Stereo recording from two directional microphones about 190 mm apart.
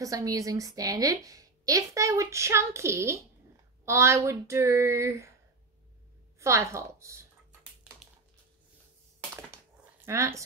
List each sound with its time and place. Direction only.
0.0 s a woman's voice: 20° right (ahead or behind)
6.4 s a woman's voice: 15° right (ahead or behind)
10.0 s a woman's voice: 15° right (ahead or behind)